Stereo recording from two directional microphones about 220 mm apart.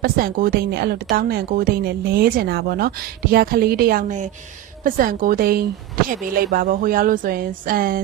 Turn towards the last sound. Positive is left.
turn(degrees=-40)  # may be behind; listen again after turning